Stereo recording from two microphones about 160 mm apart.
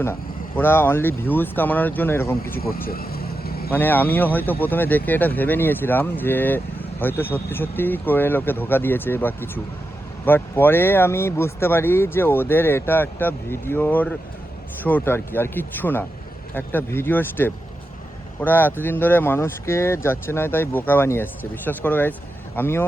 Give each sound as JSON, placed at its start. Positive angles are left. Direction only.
{"t": 0.0, "sound": "speech", "side_deg": 15}
{"t": 2.6, "sound": "vehicle", "side_deg": 65}
{"t": 3.7, "sound": "speech", "side_deg": 10}